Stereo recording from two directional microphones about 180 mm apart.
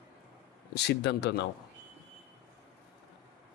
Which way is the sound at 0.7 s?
70° left (ahead or behind).